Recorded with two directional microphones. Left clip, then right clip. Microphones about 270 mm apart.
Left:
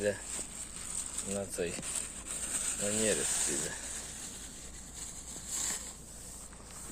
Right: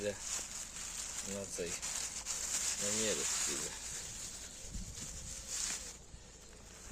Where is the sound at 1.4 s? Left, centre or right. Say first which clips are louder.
Left 6 dB; centre.